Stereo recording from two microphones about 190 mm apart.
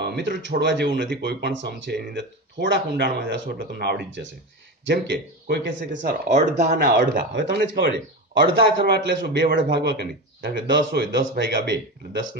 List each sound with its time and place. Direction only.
0.0 s speech: 60° right (ahead or behind)
6.3 s speech: 40° right (ahead or behind)
6.9 s a man's voice: 65° right (ahead or behind)